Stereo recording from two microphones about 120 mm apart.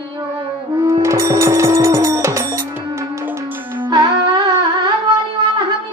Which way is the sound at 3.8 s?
40° right (ahead or behind).